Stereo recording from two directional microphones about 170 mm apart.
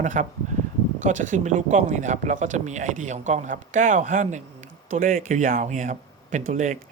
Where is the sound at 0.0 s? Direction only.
45° right (ahead or behind).